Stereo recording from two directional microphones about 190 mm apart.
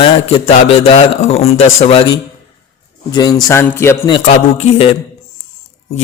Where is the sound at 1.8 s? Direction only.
30° left (ahead or behind); by 4.1 s 15° left (ahead or behind).